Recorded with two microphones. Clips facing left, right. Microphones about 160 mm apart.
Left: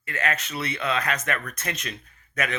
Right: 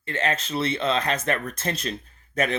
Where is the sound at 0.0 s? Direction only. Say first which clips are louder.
Right 2 dB; 25° right (ahead or behind).